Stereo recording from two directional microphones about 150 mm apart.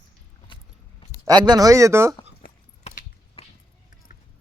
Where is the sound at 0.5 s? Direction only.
35° left (ahead or behind).